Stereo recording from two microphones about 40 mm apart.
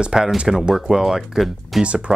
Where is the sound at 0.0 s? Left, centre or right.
Centre.